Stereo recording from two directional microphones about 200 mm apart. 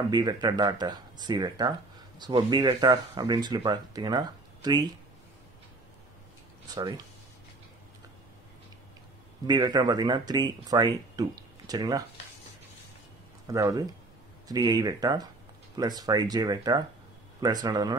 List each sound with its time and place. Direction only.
0.1 s speech: 20° right (ahead or behind)
6.7 s speech: 20° right (ahead or behind)
9.5 s speech: 20° right (ahead or behind)
13.5 s speech: 15° right (ahead or behind)